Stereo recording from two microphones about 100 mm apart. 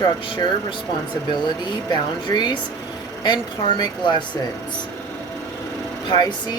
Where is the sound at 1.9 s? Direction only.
45° left (ahead or behind).